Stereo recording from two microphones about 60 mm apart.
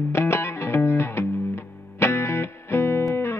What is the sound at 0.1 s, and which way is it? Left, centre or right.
Music, left.